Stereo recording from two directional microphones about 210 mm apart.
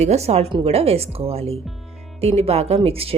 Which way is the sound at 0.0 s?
30° right (ahead or behind).